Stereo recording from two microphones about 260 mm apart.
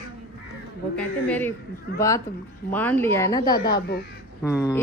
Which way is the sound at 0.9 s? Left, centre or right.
Centre.